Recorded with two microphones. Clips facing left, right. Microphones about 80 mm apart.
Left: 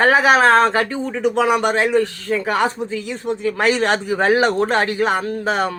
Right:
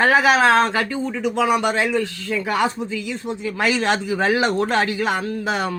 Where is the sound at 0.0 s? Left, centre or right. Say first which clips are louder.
Left 2 dB; left.